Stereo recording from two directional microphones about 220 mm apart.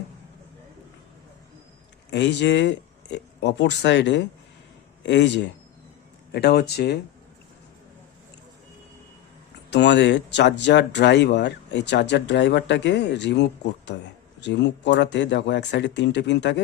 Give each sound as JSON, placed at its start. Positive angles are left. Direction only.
{"t": 2.0, "sound": "speech", "side_deg": 55}
{"t": 9.6, "sound": "speech", "side_deg": 50}